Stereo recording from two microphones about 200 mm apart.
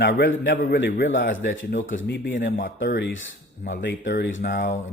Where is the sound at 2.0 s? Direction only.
55° left (ahead or behind).